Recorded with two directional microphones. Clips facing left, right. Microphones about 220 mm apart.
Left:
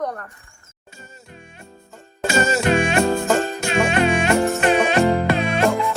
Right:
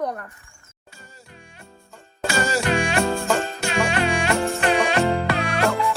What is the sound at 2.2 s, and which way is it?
Music, 20° left (ahead or behind).